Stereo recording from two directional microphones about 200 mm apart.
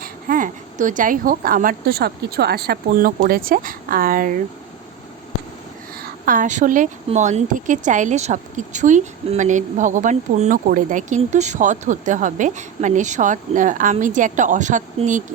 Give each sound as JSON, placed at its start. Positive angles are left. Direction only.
{"t": 0.0, "sound": "a woman's voice", "side_deg": -40}
{"t": 6.0, "sound": "a woman's voice", "side_deg": -45}